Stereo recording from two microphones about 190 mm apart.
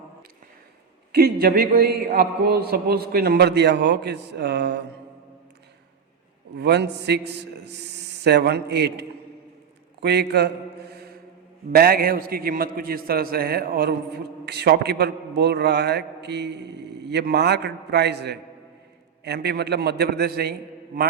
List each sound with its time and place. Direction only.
1.1 s a man's voice: 55° right (ahead or behind)
6.6 s a man's voice: 65° right (ahead or behind)
11.7 s a man's voice: 50° right (ahead or behind)